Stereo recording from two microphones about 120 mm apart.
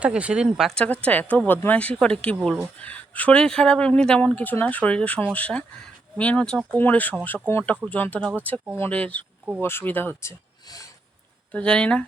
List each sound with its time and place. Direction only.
0.0 s speech: 10° right (ahead or behind)
0.7 s speech: 10° left (ahead or behind); by 10.8 s 25° left (ahead or behind)
11.5 s speech: 10° left (ahead or behind)